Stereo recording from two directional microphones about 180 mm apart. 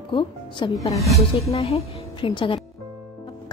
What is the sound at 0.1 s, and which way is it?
Speech, 25° left (ahead or behind).